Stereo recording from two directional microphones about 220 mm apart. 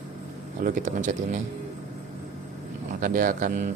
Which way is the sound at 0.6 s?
35° right (ahead or behind).